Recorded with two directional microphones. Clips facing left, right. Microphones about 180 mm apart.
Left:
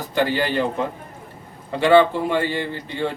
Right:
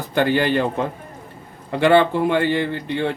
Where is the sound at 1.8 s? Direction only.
55° right (ahead or behind).